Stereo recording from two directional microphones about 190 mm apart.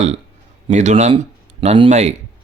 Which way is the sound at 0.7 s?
40° right (ahead or behind).